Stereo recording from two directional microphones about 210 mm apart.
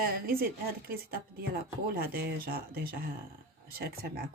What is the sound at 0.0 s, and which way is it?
Speech, 45° right (ahead or behind).